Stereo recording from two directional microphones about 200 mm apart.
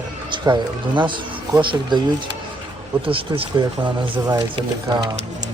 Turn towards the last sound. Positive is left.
turn(degrees=-25)  # may be behind; listen again after turning